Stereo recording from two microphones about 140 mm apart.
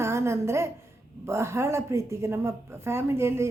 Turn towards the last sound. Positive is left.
turn(degrees=-15)  # may be behind; listen again after turning